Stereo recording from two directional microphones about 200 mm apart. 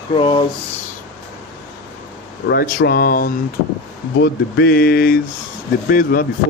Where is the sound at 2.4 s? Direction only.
50° left (ahead or behind).